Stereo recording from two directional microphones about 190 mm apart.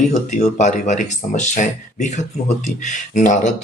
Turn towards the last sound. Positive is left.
turn(degrees=40)  # may be behind; listen again after turning